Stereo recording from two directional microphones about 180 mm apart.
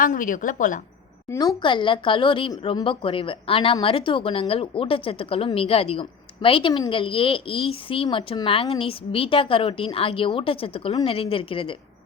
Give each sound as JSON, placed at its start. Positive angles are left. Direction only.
{"t": 0.0, "sound": "a woman's voice", "side_deg": 45}
{"t": 1.3, "sound": "a woman's voice", "side_deg": 20}